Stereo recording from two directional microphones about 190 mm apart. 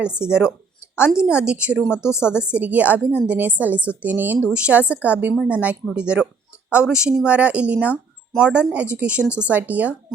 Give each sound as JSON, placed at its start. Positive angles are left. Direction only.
{"t": 0.0, "sound": "speech", "side_deg": -5}
{"t": 2.0, "sound": "a woman's voice", "side_deg": 15}
{"t": 2.4, "sound": "speech", "side_deg": -5}